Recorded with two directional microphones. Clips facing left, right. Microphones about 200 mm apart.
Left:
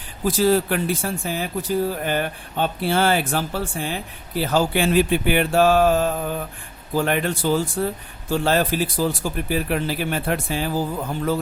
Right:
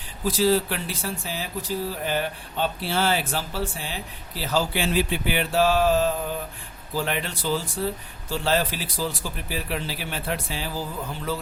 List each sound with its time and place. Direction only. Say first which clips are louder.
0.3 s speech: left 3 dB; 50° left (ahead or behind)